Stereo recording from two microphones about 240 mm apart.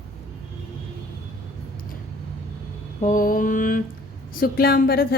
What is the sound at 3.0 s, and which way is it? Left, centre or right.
Mantra, left.